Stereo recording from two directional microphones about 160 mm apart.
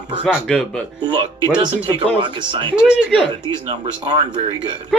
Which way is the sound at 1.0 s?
30° right (ahead or behind).